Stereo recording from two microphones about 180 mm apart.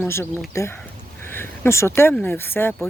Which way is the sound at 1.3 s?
10° left (ahead or behind).